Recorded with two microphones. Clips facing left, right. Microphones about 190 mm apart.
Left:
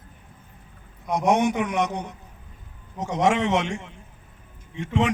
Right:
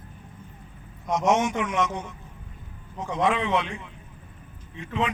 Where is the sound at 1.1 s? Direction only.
60° left (ahead or behind).